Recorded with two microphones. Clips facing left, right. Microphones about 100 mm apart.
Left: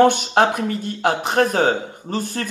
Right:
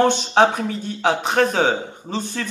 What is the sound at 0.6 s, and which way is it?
Speech, 55° left (ahead or behind).